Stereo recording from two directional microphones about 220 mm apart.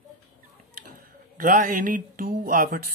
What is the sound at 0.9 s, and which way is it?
Speech, 40° right (ahead or behind).